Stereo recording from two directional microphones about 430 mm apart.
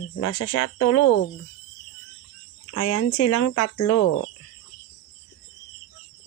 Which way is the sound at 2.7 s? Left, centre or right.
Left.